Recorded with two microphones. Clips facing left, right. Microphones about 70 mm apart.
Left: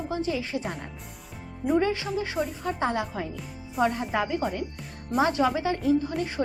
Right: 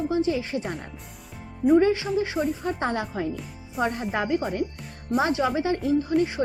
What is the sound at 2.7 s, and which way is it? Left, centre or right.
Speech, right.